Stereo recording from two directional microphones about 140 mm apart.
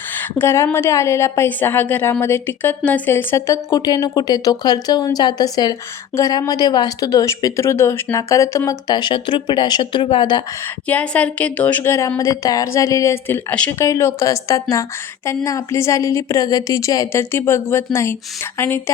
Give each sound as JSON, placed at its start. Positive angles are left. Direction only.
{"t": 0.1, "sound": "a woman's voice", "side_deg": 15}
{"t": 10.8, "sound": "a woman's voice", "side_deg": 10}